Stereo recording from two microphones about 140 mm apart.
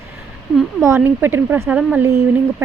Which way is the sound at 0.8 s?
15° right (ahead or behind).